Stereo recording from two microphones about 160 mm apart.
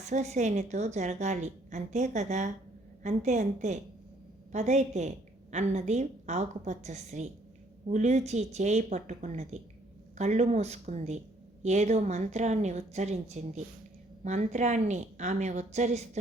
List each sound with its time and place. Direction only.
0.0 s a woman's voice: 45° right (ahead or behind)